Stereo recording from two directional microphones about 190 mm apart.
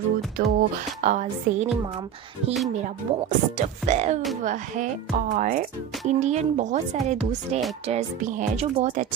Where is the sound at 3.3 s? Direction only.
40° right (ahead or behind).